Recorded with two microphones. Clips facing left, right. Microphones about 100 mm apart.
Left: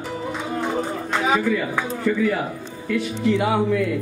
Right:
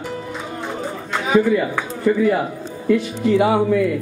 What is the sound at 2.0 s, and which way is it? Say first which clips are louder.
Speech: right 5 dB; 25° right (ahead or behind).